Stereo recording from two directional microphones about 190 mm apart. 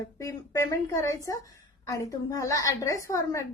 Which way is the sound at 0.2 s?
15° left (ahead or behind).